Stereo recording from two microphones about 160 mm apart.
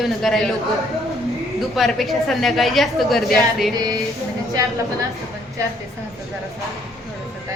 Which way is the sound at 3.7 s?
25° right (ahead or behind).